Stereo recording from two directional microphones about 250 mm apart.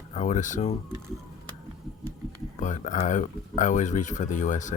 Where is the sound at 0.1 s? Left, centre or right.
Left.